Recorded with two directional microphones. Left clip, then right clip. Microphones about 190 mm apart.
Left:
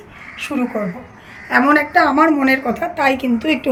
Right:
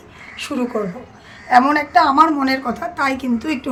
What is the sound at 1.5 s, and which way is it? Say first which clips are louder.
Speech: right 2 dB; 10° right (ahead or behind).